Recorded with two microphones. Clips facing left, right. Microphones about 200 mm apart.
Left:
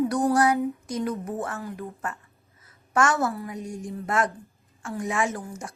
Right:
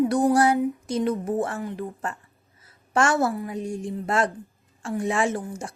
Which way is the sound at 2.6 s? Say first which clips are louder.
Right 1 dB; 30° right (ahead or behind).